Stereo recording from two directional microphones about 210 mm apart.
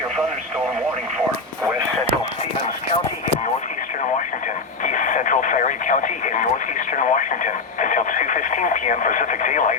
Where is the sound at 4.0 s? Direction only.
35° left (ahead or behind).